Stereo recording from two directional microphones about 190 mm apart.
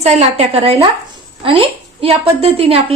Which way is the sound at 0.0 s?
35° right (ahead or behind).